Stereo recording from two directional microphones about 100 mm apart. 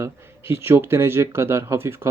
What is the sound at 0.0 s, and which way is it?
Speech, 25° right (ahead or behind).